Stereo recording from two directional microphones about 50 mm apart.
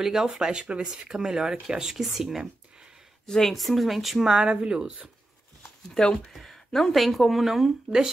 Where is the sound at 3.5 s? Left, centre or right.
Centre.